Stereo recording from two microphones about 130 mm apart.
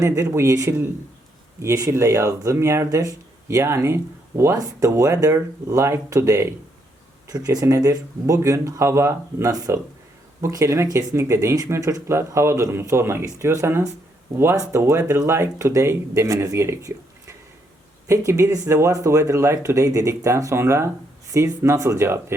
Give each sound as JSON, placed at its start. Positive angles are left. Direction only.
{"t": 0.0, "sound": "speech", "side_deg": -20}